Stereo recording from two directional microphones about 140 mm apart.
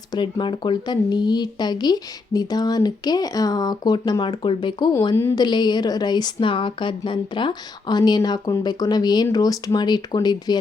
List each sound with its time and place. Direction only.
0.1 s speech: 35° left (ahead or behind)
5.1 s a woman's voice: 15° left (ahead or behind)
5.4 s speech: 30° left (ahead or behind)